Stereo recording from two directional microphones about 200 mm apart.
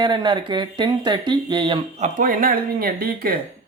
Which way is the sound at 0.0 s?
20° right (ahead or behind).